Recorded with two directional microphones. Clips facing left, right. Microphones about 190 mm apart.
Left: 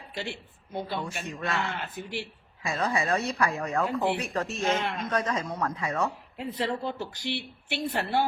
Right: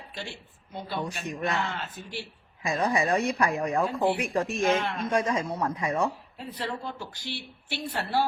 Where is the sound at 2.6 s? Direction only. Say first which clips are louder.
Right 2 dB; 15° right (ahead or behind).